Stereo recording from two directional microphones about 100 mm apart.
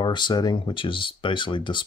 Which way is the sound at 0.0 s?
50° left (ahead or behind).